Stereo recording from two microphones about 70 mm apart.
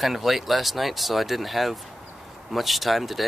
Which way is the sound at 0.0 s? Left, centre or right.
Centre.